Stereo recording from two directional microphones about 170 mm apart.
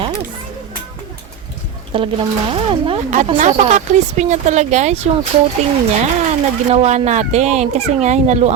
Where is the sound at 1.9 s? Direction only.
30° right (ahead or behind).